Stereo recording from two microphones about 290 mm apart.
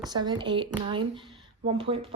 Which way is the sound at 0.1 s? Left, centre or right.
Centre.